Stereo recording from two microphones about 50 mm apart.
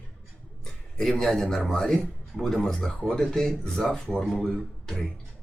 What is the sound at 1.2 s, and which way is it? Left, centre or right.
Speech, centre.